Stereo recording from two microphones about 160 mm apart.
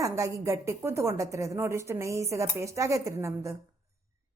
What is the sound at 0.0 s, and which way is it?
A woman's voice, 20° right (ahead or behind).